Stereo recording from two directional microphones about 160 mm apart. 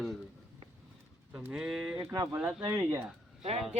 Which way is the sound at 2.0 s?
15° right (ahead or behind).